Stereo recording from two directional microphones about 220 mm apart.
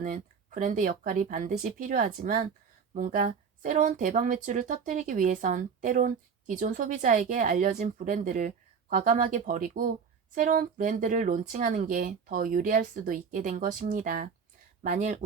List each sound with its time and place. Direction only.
0.0 s a woman's voice: 35° right (ahead or behind)